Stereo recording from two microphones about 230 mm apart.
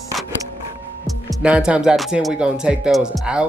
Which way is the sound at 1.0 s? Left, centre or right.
Centre.